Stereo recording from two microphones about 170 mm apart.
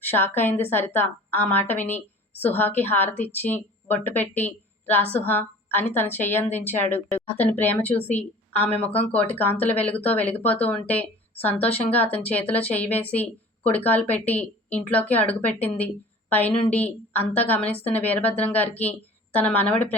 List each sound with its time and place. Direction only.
0.0 s a woman's voice: 10° left (ahead or behind)
12.1 s a woman's voice: 35° left (ahead or behind)
12.5 s a woman's voice: 10° left (ahead or behind)